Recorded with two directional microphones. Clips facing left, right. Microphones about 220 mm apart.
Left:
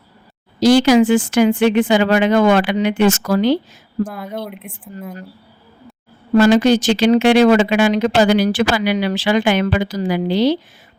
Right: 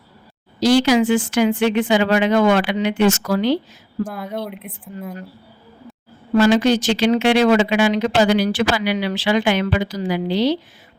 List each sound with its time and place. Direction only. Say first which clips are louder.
0.6 s speech: left 4 dB; 45° left (ahead or behind)
4.0 s speech: left 1 dB; centre (ahead or behind)
6.3 s speech: left 3 dB; 45° left (ahead or behind)